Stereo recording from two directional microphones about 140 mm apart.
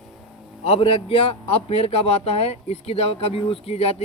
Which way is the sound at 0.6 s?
45° left (ahead or behind).